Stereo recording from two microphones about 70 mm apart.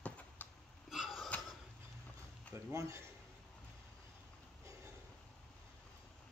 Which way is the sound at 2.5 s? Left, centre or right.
Right.